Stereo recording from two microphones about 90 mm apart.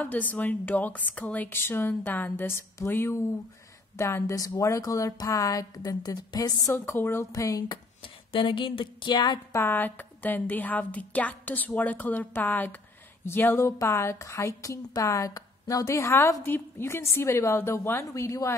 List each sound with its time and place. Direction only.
0.0 s a woman's voice: 20° left (ahead or behind); by 6.7 s 45° left (ahead or behind)
6.7 s speech: 25° left (ahead or behind)
7.3 s a woman's voice: 40° left (ahead or behind)
7.6 s speech: 70° left (ahead or behind); by 9.6 s 50° left (ahead or behind)
9.6 s a woman's voice: 20° left (ahead or behind)